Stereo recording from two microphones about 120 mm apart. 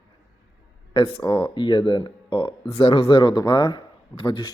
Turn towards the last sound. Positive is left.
turn(degrees=45)  # may be behind; listen again after turning